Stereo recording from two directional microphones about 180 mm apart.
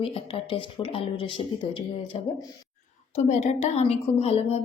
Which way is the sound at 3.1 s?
40° left (ahead or behind).